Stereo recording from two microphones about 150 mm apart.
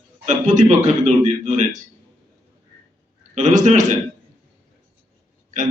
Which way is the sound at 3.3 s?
55° right (ahead or behind).